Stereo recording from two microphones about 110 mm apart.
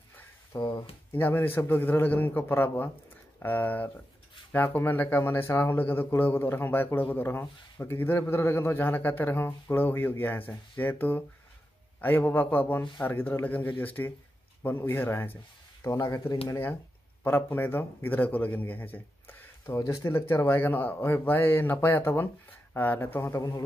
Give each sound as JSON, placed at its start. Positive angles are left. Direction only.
{"t": 0.6, "sound": "speech", "side_deg": 40}
{"t": 1.1, "sound": "a man's voice", "side_deg": 20}
{"t": 15.8, "sound": "a man's voice", "side_deg": 30}